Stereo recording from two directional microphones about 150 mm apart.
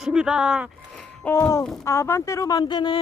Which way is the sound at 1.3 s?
20° left (ahead or behind).